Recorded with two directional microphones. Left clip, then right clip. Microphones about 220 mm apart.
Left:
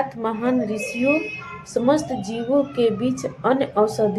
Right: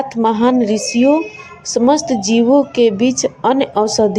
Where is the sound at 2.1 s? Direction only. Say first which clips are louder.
Right 11 dB; 35° right (ahead or behind).